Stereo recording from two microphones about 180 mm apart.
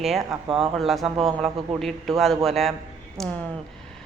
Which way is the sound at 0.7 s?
Centre (ahead or behind).